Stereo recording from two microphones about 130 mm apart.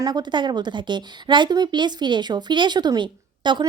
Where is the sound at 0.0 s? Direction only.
35° right (ahead or behind).